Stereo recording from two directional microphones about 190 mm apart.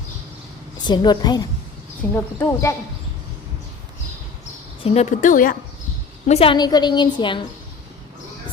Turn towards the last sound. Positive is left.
turn(degrees=25)  # may be behind; listen again after turning